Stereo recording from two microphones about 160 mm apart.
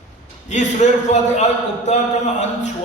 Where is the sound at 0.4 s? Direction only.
45° left (ahead or behind).